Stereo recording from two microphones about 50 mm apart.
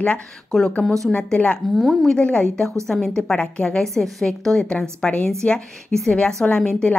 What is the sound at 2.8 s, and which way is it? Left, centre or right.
A woman's voice, centre.